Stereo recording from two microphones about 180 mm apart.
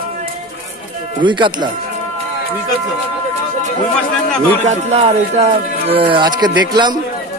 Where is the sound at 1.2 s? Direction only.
25° right (ahead or behind).